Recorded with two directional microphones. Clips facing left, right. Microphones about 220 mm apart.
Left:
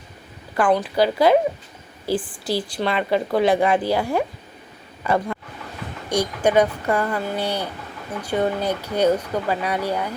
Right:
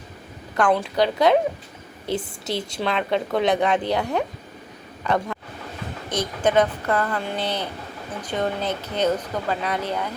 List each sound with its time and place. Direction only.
0.5 s a woman's voice: 5° left (ahead or behind)
2.1 s a woman's voice: 25° right (ahead or behind)
2.7 s a woman's voice: 5° left (ahead or behind)